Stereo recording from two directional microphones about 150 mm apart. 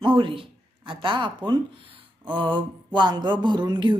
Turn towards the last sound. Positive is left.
turn(degrees=-30)  # may be behind; listen again after turning